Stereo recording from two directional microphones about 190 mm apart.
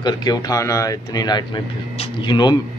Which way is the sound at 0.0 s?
20° left (ahead or behind).